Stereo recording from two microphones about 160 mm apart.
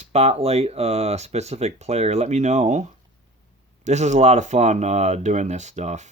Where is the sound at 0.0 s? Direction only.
40° right (ahead or behind).